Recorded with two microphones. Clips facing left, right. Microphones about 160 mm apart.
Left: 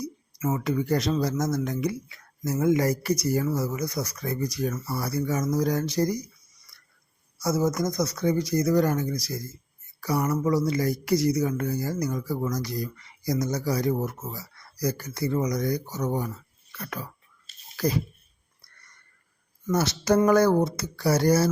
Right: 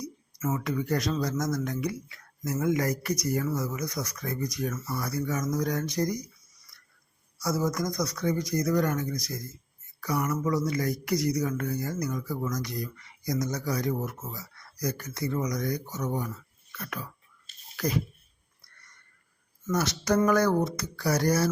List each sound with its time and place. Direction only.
0.4 s speech: 30° left (ahead or behind)
7.3 s speech: 25° left (ahead or behind)
16.7 s whispering: 35° left (ahead or behind)
19.7 s speech: 30° left (ahead or behind)